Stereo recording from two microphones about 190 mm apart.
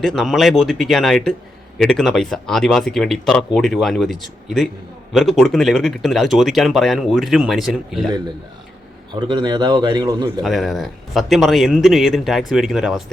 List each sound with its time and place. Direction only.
0.0 s speech: centre (ahead or behind)
9.1 s a man's voice: 25° right (ahead or behind)
10.4 s speech: centre (ahead or behind)